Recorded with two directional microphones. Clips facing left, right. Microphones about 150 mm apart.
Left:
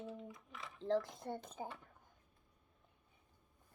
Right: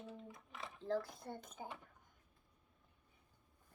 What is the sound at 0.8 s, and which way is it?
Speech, 20° left (ahead or behind).